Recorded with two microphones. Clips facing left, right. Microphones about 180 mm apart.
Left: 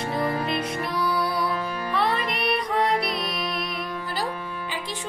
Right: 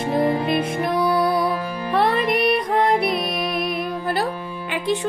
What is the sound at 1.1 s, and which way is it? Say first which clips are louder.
Music: right 6 dB; 50° right (ahead or behind).